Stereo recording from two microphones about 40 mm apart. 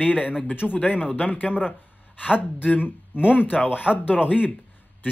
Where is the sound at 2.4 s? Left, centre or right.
Left.